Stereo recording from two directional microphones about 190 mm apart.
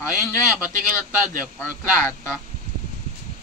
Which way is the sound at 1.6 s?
15° left (ahead or behind).